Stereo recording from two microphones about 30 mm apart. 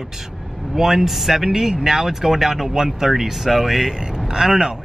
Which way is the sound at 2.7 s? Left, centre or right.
Centre.